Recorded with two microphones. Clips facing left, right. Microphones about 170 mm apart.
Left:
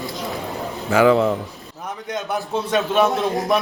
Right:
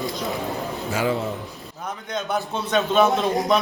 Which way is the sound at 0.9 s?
75° left (ahead or behind).